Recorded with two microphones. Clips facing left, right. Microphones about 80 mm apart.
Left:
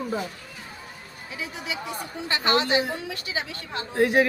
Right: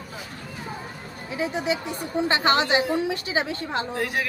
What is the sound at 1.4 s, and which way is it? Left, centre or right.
A woman's voice, right.